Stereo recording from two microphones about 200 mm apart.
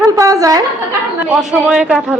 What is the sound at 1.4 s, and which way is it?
Speech, 5° right (ahead or behind).